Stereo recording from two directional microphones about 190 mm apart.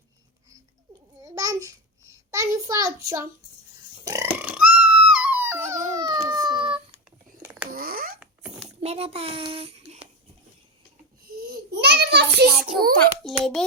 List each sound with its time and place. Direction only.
1.2 s babbling: 20° right (ahead or behind)
2.3 s a child's voice: 15° right (ahead or behind)
4.0 s a sound: 15° right (ahead or behind)
5.9 s child singing: 20° right (ahead or behind)
7.7 s cat: 50° right (ahead or behind)
8.2 s a sound: 5° right (ahead or behind)
8.8 s a child's voice: 30° right (ahead or behind)
11.8 s a sound: 60° right (ahead or behind)
12.6 s a child's voice: 50° right (ahead or behind)
13.0 s a child's voice: centre (ahead or behind)